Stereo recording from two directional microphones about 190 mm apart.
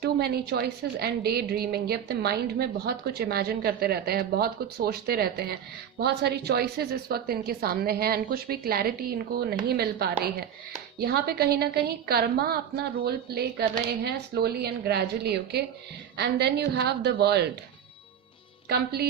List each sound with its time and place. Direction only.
0.0 s a woman's voice: 55° right (ahead or behind)
18.7 s a woman's voice: 55° right (ahead or behind)